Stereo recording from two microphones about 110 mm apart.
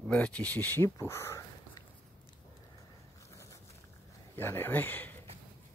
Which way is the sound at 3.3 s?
25° left (ahead or behind).